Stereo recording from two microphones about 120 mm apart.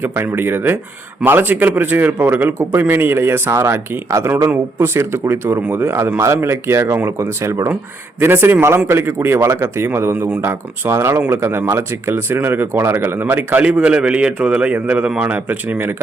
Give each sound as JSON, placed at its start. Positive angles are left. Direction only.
{"t": 0.0, "sound": "speech", "side_deg": -20}